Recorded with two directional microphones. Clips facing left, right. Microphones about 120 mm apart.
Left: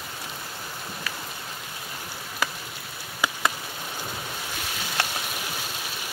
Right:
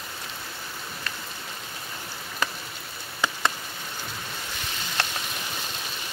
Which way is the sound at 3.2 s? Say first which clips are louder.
Even; 10° left (ahead or behind).